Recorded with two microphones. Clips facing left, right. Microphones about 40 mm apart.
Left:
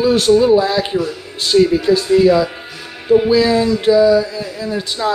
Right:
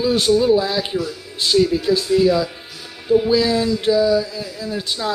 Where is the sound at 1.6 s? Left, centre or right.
Left.